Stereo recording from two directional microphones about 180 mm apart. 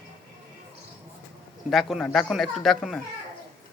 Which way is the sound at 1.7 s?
Centre (ahead or behind).